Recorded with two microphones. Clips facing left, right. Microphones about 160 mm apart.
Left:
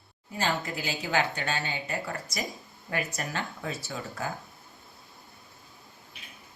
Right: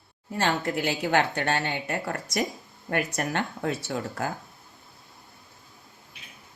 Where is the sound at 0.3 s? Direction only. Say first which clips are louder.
Right 4 dB; 65° right (ahead or behind).